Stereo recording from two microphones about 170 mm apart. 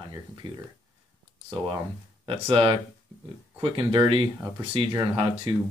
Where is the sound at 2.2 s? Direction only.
30° right (ahead or behind).